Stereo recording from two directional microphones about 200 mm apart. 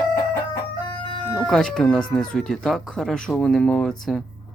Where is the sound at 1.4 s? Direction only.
Centre (ahead or behind).